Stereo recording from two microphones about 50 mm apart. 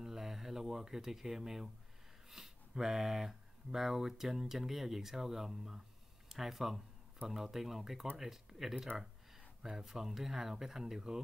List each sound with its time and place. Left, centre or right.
0.0 s speech: centre